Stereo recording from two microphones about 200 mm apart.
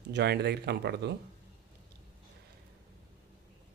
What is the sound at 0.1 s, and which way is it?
Speech, 55° right (ahead or behind).